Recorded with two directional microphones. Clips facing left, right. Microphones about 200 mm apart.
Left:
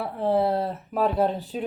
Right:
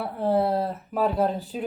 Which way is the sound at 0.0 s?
Centre (ahead or behind).